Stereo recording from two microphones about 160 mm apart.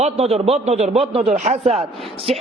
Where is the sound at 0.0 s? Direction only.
40° right (ahead or behind).